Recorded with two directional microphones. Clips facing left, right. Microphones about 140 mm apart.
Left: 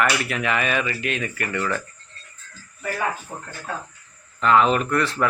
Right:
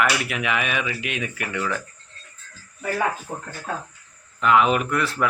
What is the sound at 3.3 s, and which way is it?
Speech, 40° right (ahead or behind).